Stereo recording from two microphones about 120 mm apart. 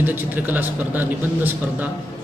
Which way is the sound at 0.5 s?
15° right (ahead or behind).